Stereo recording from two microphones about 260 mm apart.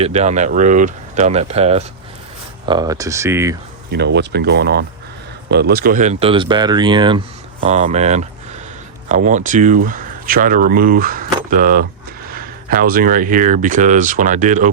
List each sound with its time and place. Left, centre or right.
0.0 s speech: right
3.9 s speech: right